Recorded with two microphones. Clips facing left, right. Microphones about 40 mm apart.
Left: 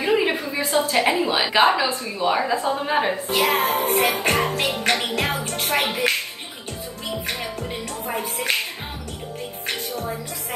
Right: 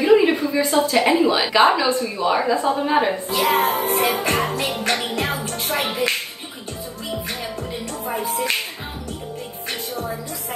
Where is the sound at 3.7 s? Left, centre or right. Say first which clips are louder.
Even; left.